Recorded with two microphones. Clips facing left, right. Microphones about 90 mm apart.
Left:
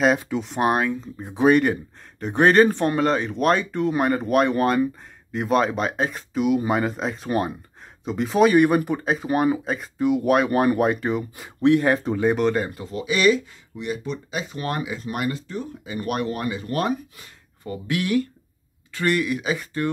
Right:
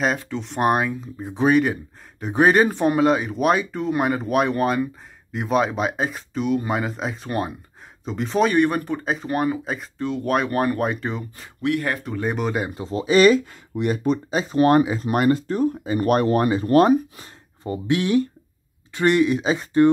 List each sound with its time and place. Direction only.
0.2 s speech: 5° left (ahead or behind)
11.6 s speech: 25° left (ahead or behind)
12.2 s speech: centre (ahead or behind)
12.7 s speech: 30° right (ahead or behind)